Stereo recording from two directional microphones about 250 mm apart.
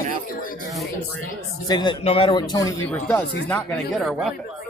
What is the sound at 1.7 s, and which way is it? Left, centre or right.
Speech, centre.